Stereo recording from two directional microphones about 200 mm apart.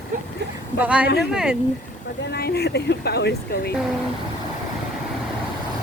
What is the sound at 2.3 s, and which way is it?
A woman's voice, 50° left (ahead or behind).